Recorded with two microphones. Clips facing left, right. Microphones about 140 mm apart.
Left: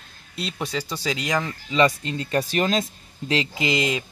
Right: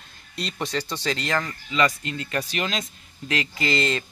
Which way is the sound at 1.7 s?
30° left (ahead or behind).